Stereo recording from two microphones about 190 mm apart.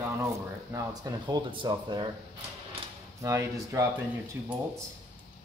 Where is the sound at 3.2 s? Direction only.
15° right (ahead or behind).